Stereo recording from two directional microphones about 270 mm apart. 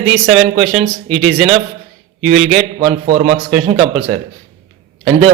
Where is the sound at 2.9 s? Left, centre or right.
Right.